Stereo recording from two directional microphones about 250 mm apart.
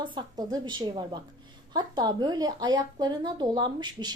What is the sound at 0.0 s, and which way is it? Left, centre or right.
A woman's voice, centre.